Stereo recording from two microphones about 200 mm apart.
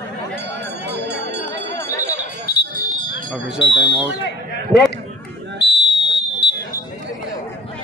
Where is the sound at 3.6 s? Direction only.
60° left (ahead or behind).